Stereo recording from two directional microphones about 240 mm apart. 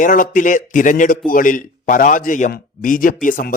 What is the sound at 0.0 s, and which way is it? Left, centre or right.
A man's voice, left.